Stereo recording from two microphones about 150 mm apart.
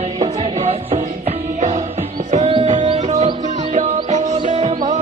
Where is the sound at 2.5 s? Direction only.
40° right (ahead or behind).